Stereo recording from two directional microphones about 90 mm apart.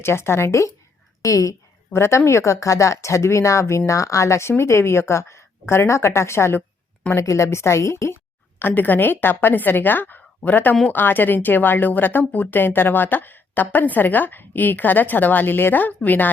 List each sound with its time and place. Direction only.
0.0 s a woman's voice: 30° left (ahead or behind)